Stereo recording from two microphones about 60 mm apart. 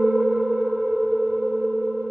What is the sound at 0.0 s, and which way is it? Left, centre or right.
Sonar, centre.